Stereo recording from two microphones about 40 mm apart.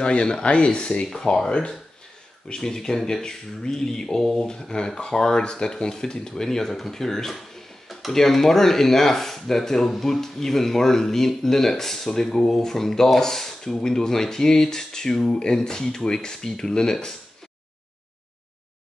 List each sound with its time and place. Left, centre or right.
0.0 s speech: left
2.4 s speech: centre